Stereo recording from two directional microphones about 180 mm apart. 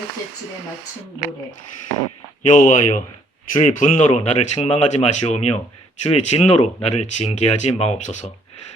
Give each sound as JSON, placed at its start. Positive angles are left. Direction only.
{"t": 2.5, "sound": "speech", "side_deg": 45}